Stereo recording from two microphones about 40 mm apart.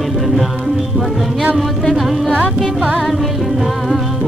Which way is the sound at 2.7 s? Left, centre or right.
Right.